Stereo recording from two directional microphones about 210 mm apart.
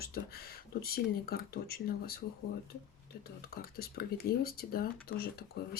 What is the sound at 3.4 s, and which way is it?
Speech, 45° left (ahead or behind).